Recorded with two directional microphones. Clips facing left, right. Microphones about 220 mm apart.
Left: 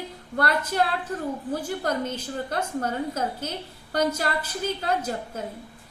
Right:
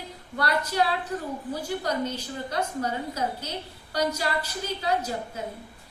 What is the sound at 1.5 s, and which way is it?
A woman's voice, 50° left (ahead or behind).